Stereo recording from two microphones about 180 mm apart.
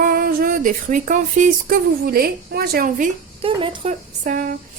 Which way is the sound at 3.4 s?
30° right (ahead or behind).